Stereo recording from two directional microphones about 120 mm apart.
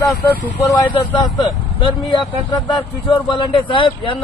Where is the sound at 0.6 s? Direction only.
30° left (ahead or behind); by 4.1 s 45° left (ahead or behind).